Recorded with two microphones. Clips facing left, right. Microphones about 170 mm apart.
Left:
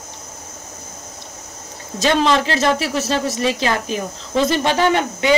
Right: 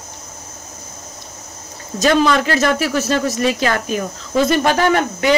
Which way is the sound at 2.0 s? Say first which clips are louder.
Right 2 dB; 25° left (ahead or behind).